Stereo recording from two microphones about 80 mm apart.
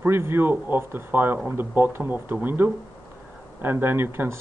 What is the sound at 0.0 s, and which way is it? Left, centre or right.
Speech, right.